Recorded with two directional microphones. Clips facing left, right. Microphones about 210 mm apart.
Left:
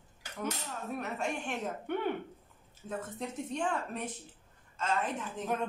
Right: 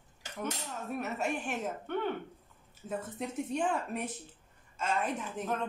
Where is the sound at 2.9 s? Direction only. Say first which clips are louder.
Right 2 dB; 10° right (ahead or behind).